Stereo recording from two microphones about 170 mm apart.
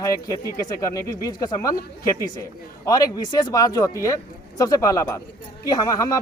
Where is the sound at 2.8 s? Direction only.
20° left (ahead or behind).